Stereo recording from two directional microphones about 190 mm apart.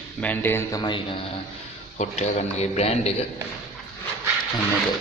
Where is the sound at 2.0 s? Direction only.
35° left (ahead or behind).